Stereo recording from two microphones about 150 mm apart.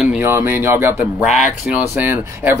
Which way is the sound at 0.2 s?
15° right (ahead or behind).